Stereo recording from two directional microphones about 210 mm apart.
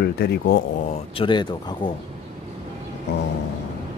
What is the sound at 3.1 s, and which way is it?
Speech, 55° left (ahead or behind).